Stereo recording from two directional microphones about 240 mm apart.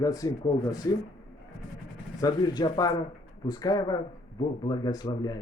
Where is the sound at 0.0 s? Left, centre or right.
Centre.